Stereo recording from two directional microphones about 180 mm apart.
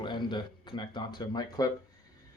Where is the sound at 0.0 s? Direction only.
25° left (ahead or behind).